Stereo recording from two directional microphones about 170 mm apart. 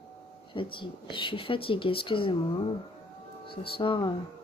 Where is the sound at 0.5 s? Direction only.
30° left (ahead or behind).